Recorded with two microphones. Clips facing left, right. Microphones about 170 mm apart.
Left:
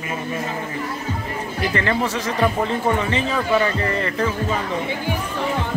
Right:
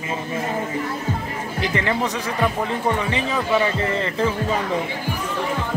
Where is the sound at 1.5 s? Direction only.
15° right (ahead or behind).